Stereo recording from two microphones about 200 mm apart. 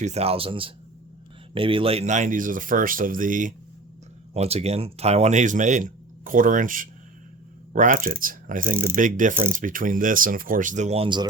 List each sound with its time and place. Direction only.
0.0 s a man's voice: 30° right (ahead or behind)
8.7 s speech: 15° right (ahead or behind)
9.0 s a man's voice: 40° right (ahead or behind); by 11.3 s 25° right (ahead or behind)